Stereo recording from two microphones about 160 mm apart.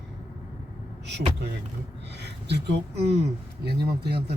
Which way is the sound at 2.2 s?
90° right.